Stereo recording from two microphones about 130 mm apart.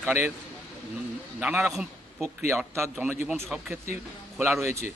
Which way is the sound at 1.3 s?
10° right (ahead or behind).